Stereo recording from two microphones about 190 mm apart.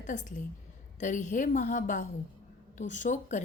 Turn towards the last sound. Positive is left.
turn(degrees=40)  # may be behind; listen again after turning